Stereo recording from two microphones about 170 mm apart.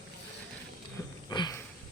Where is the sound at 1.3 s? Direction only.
25° left (ahead or behind).